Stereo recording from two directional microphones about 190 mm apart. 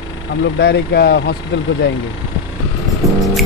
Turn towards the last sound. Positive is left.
turn(degrees=-15)  # may be behind; listen again after turning